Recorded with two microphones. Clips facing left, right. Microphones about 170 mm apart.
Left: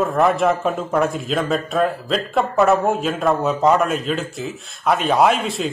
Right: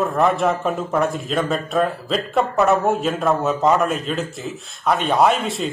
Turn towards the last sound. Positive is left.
turn(degrees=0)  # may be behind; listen again after turning